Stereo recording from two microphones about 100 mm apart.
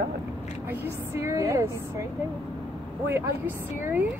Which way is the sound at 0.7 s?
25° right (ahead or behind).